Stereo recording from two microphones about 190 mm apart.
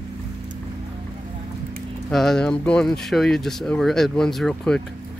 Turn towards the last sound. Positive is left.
turn(degrees=5)  # may be behind; listen again after turning